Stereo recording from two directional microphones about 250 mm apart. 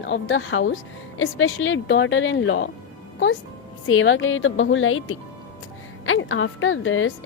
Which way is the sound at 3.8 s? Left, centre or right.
Left.